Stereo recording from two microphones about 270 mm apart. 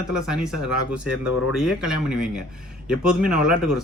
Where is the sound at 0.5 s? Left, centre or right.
Left.